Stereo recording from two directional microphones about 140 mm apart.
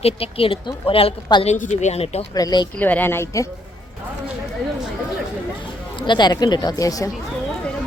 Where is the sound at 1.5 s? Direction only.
60° left (ahead or behind).